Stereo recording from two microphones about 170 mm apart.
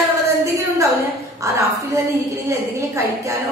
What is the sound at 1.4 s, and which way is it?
A woman's voice, 15° right (ahead or behind).